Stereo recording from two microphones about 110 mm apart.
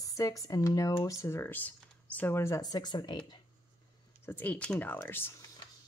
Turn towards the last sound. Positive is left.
turn(degrees=20)  # may be behind; listen again after turning